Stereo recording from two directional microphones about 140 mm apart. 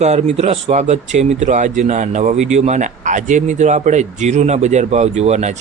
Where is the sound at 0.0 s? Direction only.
55° right (ahead or behind).